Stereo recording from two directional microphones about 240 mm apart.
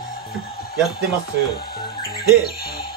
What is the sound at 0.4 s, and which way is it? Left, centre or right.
Speech, left.